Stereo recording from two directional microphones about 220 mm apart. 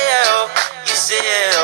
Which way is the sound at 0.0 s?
50° right (ahead or behind).